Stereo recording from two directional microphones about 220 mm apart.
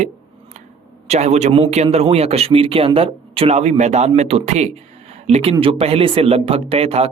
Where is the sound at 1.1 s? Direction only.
30° right (ahead or behind).